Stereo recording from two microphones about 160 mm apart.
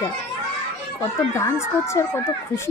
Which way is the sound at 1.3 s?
15° left (ahead or behind).